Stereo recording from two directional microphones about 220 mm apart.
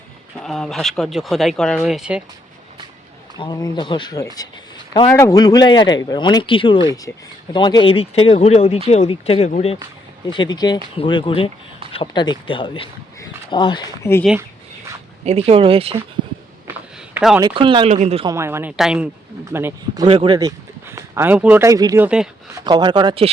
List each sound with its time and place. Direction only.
0.3 s speech: centre (ahead or behind)
3.3 s speech: 20° left (ahead or behind)
15.2 s speech: 30° right (ahead or behind)
17.2 s speech: 5° right (ahead or behind)
17.4 s speech: 25° right (ahead or behind)
18.3 s speech: 10° right (ahead or behind)
20.1 s speech: 25° right (ahead or behind); by 22.3 s 5° right (ahead or behind)
22.6 s speech: 20° right (ahead or behind)